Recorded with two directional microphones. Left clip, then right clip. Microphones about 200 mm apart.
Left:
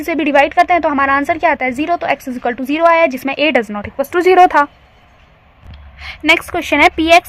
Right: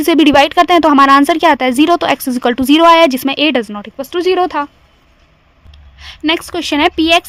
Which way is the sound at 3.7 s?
35° right (ahead or behind).